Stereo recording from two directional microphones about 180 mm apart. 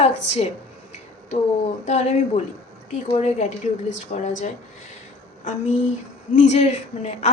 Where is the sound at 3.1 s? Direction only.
40° left (ahead or behind).